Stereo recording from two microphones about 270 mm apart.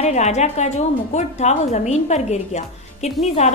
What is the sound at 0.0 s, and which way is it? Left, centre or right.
A woman's voice, left.